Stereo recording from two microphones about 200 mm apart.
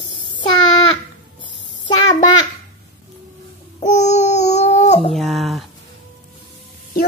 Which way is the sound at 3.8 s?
35° left (ahead or behind).